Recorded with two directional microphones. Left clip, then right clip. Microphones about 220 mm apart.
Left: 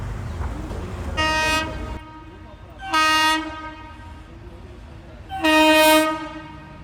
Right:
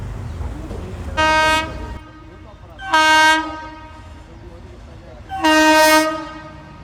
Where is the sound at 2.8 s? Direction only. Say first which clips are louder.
Right 6 dB; 15° right (ahead or behind).